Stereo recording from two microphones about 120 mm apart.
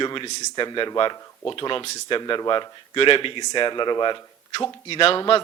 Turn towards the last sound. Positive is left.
turn(degrees=45)  # may be behind; listen again after turning